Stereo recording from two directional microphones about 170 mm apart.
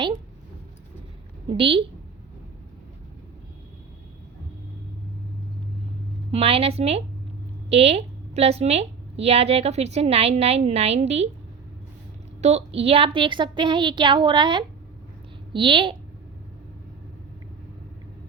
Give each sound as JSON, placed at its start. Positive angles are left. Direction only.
{"t": 1.5, "sound": "a woman's voice", "side_deg": -30}
{"t": 6.3, "sound": "a woman's voice", "side_deg": -35}
{"t": 12.4, "sound": "a woman's voice", "side_deg": -40}